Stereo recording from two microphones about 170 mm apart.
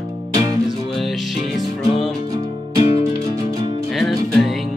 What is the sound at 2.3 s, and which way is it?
Music, 25° right (ahead or behind).